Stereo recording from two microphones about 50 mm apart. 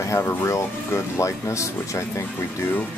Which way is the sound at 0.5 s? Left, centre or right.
Left.